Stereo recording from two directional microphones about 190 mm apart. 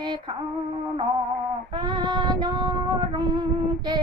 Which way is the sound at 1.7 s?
25° right (ahead or behind).